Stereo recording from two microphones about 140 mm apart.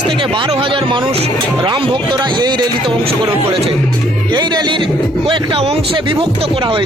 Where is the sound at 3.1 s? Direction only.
45° right (ahead or behind).